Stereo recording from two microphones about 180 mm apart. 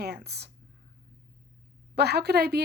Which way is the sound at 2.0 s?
65° right (ahead or behind).